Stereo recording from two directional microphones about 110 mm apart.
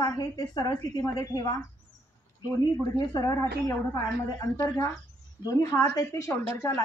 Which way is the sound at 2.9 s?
30° left (ahead or behind).